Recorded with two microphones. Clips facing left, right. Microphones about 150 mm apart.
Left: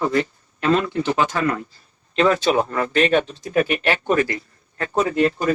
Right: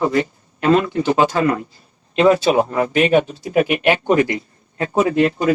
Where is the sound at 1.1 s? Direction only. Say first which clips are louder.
Right 6 dB; 25° right (ahead or behind).